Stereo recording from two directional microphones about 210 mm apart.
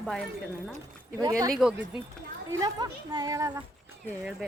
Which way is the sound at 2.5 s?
15° right (ahead or behind).